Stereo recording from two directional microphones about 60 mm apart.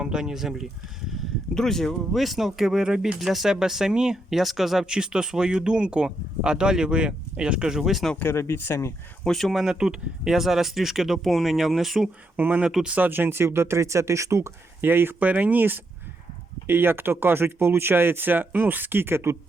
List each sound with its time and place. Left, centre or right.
0.0 s speech: centre
1.5 s speech: centre
8.2 s speech: left
9.2 s speech: centre
12.4 s speech: right
14.8 s speech: right